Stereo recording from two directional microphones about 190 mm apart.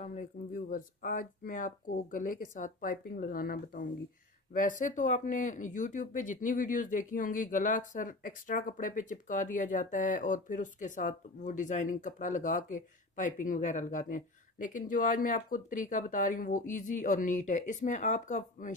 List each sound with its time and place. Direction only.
0.0 s speech: 45° left (ahead or behind)